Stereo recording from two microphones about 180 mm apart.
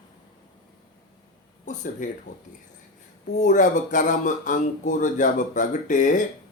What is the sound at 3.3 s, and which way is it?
A man's voice, 45° left (ahead or behind).